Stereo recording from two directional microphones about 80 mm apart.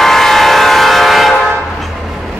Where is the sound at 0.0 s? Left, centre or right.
Centre.